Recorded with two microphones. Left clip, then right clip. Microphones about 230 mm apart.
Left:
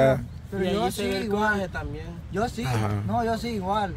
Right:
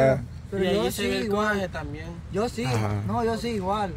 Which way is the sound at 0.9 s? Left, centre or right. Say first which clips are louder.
Right 1 dB; centre.